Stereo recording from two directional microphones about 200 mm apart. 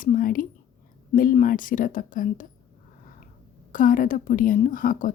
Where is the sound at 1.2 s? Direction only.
45° left (ahead or behind).